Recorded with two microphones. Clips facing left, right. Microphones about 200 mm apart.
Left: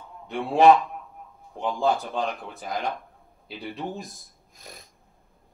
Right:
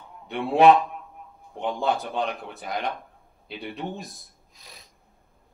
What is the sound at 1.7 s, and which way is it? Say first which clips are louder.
Speech: left 2 dB; 65° right (ahead or behind).